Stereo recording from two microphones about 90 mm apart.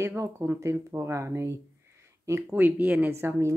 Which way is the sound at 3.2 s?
30° right (ahead or behind).